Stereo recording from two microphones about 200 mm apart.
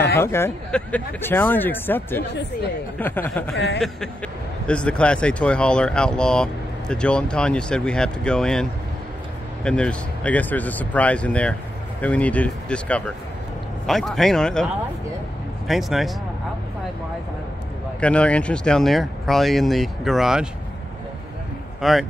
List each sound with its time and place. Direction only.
0.2 s speech: 10° left (ahead or behind)
3.5 s speech: 60° left (ahead or behind)
4.6 s speech: 5° left (ahead or behind)
9.7 s speech: 5° left (ahead or behind)
18.0 s speech: 5° left (ahead or behind)
21.8 s speech: centre (ahead or behind)